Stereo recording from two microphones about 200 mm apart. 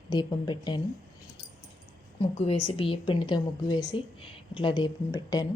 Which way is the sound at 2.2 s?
30° left (ahead or behind).